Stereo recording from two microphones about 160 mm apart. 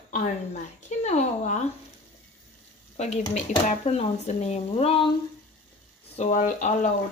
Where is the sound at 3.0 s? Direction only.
45° left (ahead or behind).